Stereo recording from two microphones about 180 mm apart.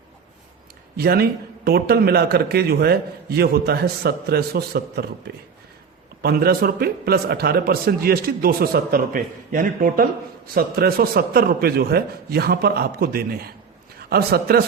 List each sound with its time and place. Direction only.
0.9 s a man's voice: 60° right (ahead or behind)
6.2 s a man's voice: 55° right (ahead or behind)